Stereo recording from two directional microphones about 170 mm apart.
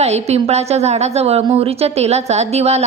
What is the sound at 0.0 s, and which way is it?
A woman's voice, 40° right (ahead or behind).